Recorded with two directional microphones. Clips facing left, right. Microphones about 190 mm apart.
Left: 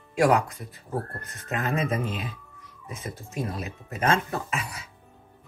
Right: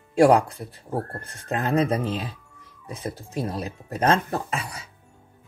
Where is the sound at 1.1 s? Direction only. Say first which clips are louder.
Right 3 dB; 35° right (ahead or behind).